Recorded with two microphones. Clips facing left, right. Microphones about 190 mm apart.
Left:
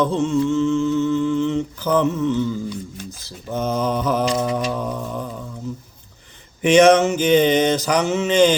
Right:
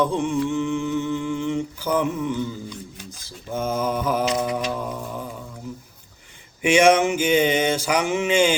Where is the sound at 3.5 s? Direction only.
10° right (ahead or behind).